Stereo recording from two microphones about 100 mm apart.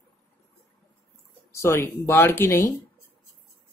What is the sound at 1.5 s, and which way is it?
Speech, 25° left (ahead or behind).